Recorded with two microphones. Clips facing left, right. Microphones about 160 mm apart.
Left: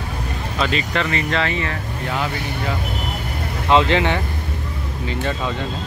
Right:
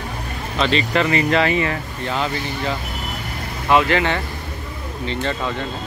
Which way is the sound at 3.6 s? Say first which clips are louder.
Left 1 dB; 20° left (ahead or behind).